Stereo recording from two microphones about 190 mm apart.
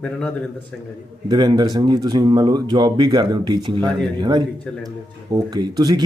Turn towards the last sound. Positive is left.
turn(degrees=-20)  # may be behind; listen again after turning